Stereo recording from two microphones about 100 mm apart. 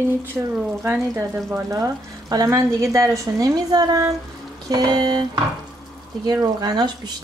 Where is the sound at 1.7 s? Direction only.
35° right (ahead or behind).